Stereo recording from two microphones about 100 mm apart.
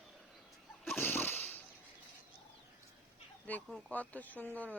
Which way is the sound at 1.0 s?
20° left (ahead or behind).